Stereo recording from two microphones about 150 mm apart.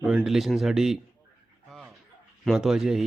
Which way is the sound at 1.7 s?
Centre (ahead or behind).